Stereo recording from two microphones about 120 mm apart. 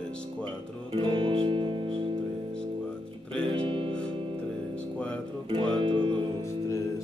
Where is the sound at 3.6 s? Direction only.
45° right (ahead or behind).